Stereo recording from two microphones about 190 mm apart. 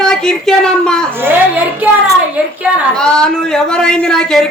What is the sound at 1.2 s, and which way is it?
Speech, 10° right (ahead or behind).